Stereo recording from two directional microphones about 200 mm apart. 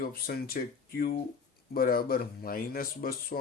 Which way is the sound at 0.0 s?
50° left (ahead or behind).